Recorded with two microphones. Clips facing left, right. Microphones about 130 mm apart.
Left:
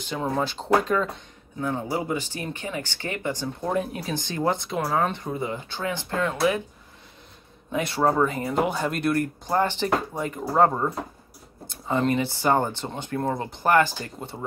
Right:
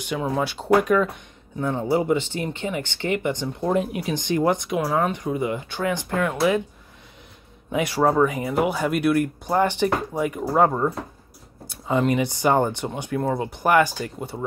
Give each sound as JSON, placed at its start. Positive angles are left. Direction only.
{"t": 0.2, "sound": "speech", "side_deg": -10}
{"t": 1.6, "sound": "speech", "side_deg": -20}
{"t": 7.7, "sound": "speech", "side_deg": -15}